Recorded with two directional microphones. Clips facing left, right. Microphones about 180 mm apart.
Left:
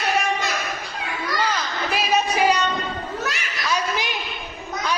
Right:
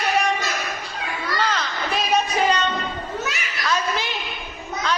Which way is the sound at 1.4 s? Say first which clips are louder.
Even; 5° left (ahead or behind).